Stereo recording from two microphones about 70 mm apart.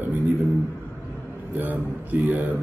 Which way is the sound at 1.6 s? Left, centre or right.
Right.